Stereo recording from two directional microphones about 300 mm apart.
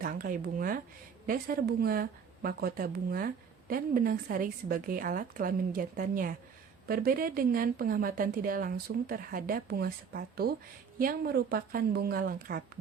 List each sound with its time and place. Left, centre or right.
0.0 s speech: right